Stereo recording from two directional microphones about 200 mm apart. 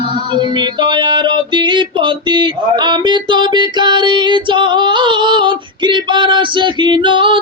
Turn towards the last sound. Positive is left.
turn(degrees=-25)  # may be behind; listen again after turning